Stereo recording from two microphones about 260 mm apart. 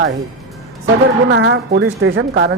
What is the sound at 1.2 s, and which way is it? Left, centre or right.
A man's voice, right.